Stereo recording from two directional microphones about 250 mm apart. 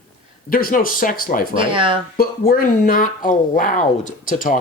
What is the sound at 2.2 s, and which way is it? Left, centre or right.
Speech, left.